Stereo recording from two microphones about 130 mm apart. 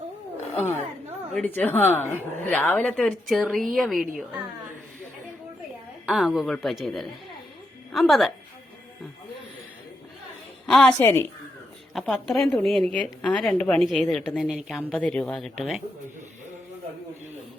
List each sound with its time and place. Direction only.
0.5 s a woman's voice: 15° left (ahead or behind); by 4.0 s centre (ahead or behind)
6.1 s a woman's voice: centre (ahead or behind)
10.7 s a woman's voice: 5° left (ahead or behind)
11.0 s speech: 20° left (ahead or behind)
11.9 s a woman's voice: centre (ahead or behind)
14.9 s a woman's voice: 10° left (ahead or behind)